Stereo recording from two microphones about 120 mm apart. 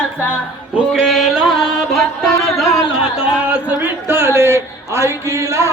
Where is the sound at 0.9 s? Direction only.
5° right (ahead or behind).